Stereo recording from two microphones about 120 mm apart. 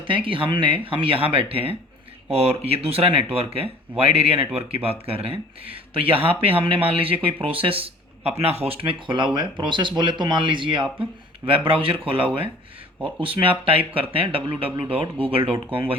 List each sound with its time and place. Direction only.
0.1 s speech: 45° right (ahead or behind)